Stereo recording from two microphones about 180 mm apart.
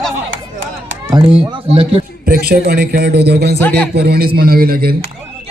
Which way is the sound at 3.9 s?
60° right (ahead or behind).